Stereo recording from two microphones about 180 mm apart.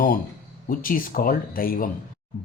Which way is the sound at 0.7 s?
50° left (ahead or behind).